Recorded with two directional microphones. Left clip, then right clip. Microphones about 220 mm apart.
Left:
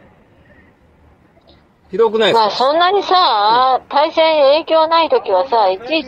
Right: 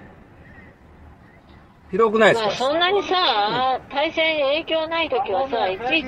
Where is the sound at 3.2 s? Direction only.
10° left (ahead or behind).